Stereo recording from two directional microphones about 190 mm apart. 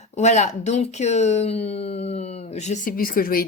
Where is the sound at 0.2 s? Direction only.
35° left (ahead or behind).